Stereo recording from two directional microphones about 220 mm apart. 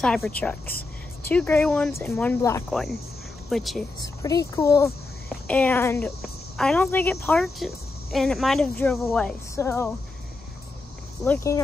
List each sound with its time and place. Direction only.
0.0 s speech: 5° left (ahead or behind)
4.2 s speech: 15° left (ahead or behind)
11.2 s speech: 10° left (ahead or behind)